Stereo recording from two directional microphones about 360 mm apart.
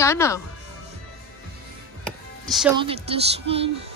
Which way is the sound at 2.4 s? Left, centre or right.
Centre.